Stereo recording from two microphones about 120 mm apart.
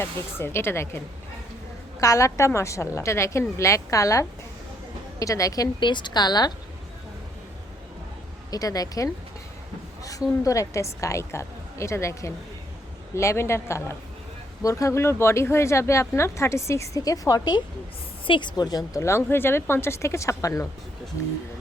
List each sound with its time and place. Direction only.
0.0 s a woman's voice: 20° left (ahead or behind); by 6.5 s 35° left (ahead or behind)
8.4 s a woman's voice: 30° left (ahead or behind)
19.0 s speech: 20° left (ahead or behind)